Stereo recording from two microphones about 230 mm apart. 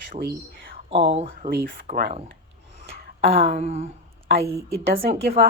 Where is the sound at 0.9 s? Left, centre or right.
Right.